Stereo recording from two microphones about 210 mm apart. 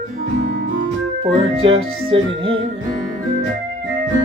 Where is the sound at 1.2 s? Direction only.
25° right (ahead or behind).